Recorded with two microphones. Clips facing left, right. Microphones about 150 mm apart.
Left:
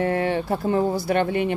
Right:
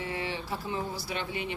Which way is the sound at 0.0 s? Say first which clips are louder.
Left 13 dB; 55° left (ahead or behind).